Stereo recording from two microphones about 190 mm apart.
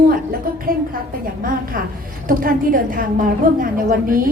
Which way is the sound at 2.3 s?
50° right (ahead or behind).